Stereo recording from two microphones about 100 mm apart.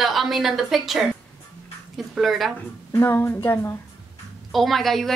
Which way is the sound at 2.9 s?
25° left (ahead or behind).